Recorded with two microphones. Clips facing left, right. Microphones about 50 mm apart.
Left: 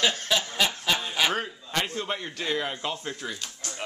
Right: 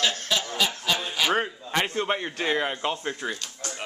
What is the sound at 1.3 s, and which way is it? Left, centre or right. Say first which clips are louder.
A man's voice: right 4 dB; right.